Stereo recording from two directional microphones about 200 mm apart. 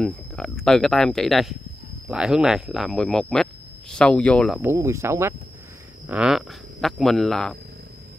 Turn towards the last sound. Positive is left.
turn(degrees=0)  # may be behind; listen again after turning